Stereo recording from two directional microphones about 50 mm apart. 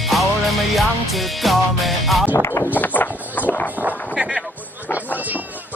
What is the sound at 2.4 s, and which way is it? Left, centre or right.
Speech, left.